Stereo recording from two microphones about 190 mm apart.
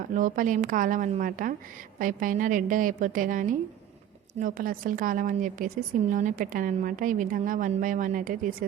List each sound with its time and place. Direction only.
0.1 s a woman's voice: 45° right (ahead or behind)